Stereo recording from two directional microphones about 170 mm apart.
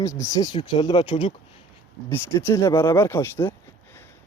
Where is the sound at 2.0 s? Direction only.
15° left (ahead or behind).